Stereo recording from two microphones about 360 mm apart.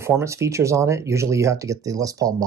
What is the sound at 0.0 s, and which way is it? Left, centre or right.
Speech, centre.